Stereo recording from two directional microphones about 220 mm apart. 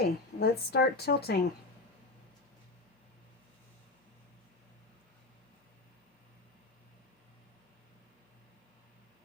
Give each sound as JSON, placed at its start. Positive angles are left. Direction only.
{"t": 0.0, "sound": "a woman's voice", "side_deg": 45}